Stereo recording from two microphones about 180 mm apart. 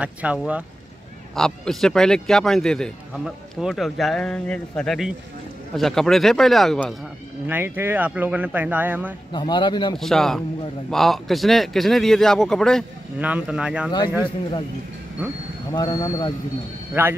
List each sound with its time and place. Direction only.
0.0 s a man's voice: 5° right (ahead or behind)
7.4 s speech: 10° right (ahead or behind)
9.3 s speech: 25° left (ahead or behind)
9.9 s a man's voice: centre (ahead or behind)
15.7 s speech: 20° left (ahead or behind)
17.0 s speech: 10° right (ahead or behind)